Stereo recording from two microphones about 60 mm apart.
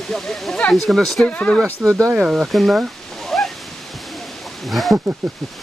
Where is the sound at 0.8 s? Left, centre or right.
Centre.